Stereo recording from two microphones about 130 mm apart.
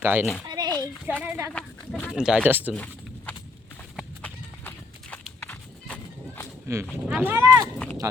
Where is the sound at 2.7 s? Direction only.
10° left (ahead or behind).